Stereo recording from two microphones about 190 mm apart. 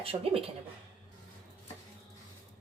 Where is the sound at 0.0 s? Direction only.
30° right (ahead or behind).